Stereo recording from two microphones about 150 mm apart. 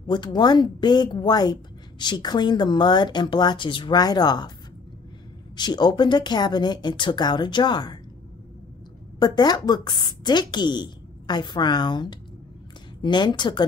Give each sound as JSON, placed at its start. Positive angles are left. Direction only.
{"t": 0.0, "sound": "a woman's voice", "side_deg": 30}
{"t": 5.6, "sound": "a woman's voice", "side_deg": 30}
{"t": 9.2, "sound": "a woman's voice", "side_deg": 25}